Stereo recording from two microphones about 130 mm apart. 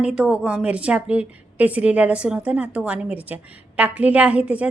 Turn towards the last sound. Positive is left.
turn(degrees=-10)  # may be behind; listen again after turning